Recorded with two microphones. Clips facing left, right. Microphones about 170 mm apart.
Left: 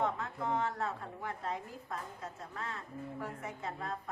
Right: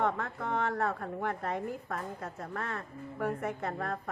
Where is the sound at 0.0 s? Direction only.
60° right (ahead or behind).